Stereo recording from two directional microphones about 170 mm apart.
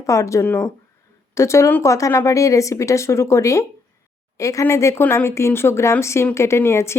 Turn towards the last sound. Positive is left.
turn(degrees=15)  # may be behind; listen again after turning